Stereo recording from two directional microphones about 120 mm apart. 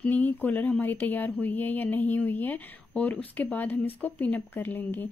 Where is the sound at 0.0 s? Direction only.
15° left (ahead or behind).